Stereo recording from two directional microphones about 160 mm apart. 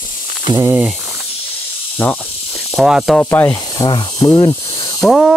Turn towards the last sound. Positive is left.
turn(degrees=0)  # may be behind; listen again after turning